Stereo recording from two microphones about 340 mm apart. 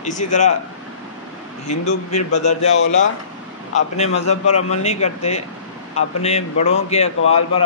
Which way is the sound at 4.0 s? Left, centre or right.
Centre.